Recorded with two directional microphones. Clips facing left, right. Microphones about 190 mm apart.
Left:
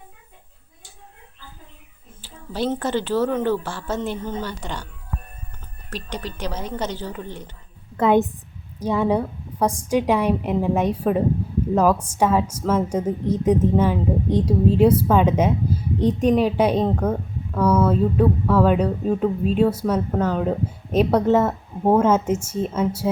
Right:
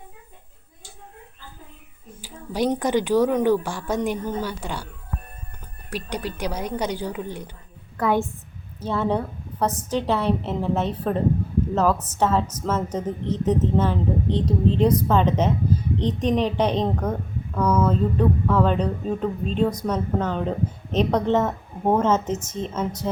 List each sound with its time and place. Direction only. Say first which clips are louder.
2.2 s speech: right 1 dB; 15° right (ahead or behind)
5.9 s speech: right 2 dB; 10° right (ahead or behind)
7.9 s a woman's voice: left 5 dB; 20° left (ahead or behind)